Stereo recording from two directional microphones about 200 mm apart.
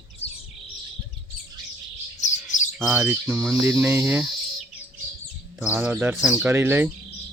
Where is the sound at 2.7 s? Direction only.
Centre (ahead or behind).